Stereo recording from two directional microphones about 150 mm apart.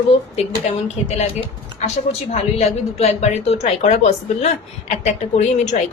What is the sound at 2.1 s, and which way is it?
Speech, 45° left (ahead or behind).